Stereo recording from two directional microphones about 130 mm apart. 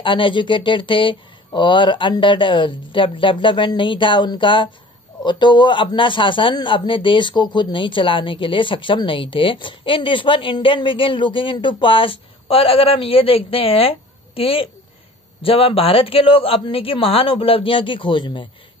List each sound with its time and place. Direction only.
0.0 s a woman's voice: 40° left (ahead or behind)